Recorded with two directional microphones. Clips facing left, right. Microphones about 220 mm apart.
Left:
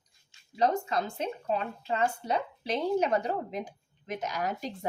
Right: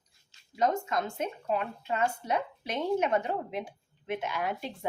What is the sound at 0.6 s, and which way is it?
Speech, 35° left (ahead or behind).